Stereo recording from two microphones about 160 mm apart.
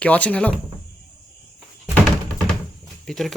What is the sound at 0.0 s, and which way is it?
Speech, 10° left (ahead or behind).